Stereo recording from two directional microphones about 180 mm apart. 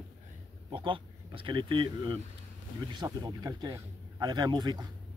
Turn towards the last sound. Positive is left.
turn(degrees=-20)  # may be behind; listen again after turning